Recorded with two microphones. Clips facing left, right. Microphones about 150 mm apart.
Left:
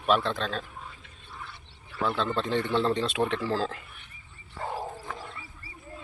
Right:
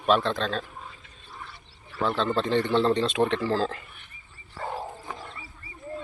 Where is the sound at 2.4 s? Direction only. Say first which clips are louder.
Right 4 dB; 5° left (ahead or behind).